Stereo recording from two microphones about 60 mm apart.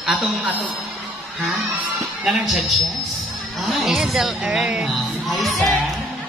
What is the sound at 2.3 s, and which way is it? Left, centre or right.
Speech, centre.